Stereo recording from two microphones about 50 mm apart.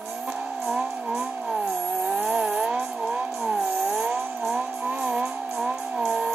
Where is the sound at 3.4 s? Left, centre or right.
Centre.